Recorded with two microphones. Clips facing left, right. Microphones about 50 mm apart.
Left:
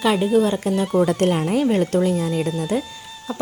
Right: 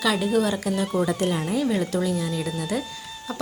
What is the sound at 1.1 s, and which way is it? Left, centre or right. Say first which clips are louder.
A woman's voice: left 5 dB; left.